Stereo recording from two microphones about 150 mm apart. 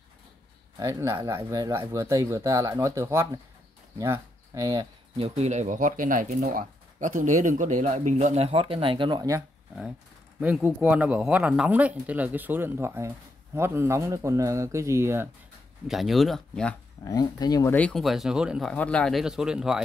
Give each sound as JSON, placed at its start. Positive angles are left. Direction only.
{"t": 0.7, "sound": "speech", "side_deg": -20}
{"t": 5.1, "sound": "speech", "side_deg": -40}
{"t": 10.4, "sound": "speech", "side_deg": -10}
{"t": 15.9, "sound": "speech", "side_deg": 0}
{"t": 17.0, "sound": "speech", "side_deg": 25}
{"t": 17.7, "sound": "speech", "side_deg": 5}
{"t": 18.7, "sound": "speech", "side_deg": 5}